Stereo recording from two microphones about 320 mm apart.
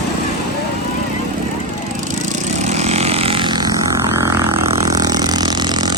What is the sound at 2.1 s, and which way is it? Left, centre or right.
Vehicle, right.